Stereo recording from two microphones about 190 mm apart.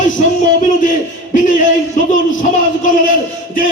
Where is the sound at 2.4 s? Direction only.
45° left (ahead or behind).